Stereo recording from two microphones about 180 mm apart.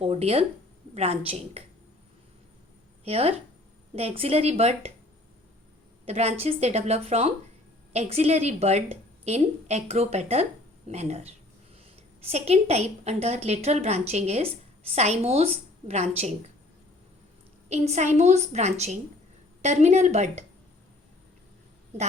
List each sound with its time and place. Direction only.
0.0 s a woman's voice: 35° right (ahead or behind)
3.0 s a woman's voice: 35° right (ahead or behind)
6.1 s a woman's voice: 35° right (ahead or behind)
17.7 s a woman's voice: 40° right (ahead or behind)